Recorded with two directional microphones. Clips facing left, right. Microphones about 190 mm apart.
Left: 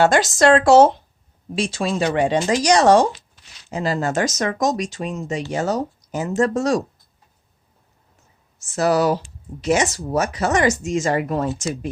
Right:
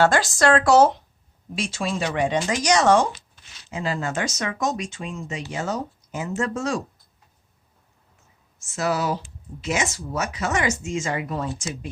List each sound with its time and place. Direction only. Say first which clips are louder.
0.0 s speech: left 4 dB; 20° left (ahead or behind); by 6.7 s 40° left (ahead or behind)
8.7 s speech: left 7 dB; 40° left (ahead or behind)